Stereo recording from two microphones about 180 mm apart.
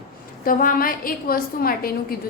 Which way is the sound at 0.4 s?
50° left (ahead or behind).